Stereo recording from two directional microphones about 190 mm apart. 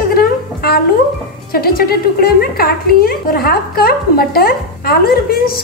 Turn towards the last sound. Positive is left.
turn(degrees=55)  # may be behind; listen again after turning